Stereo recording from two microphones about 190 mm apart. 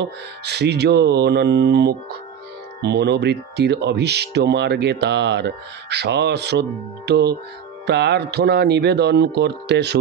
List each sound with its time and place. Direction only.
0.5 s speech: 60° right (ahead or behind)